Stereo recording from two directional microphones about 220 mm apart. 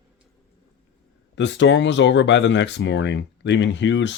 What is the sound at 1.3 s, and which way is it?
Speech, 55° left (ahead or behind).